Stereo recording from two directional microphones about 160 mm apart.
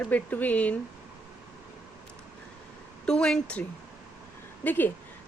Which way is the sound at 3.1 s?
5° left (ahead or behind).